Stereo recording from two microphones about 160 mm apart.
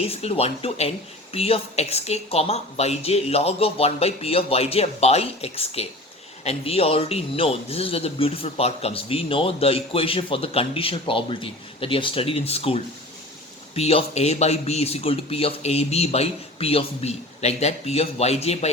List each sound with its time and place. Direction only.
0.0 s speech: 40° left (ahead or behind)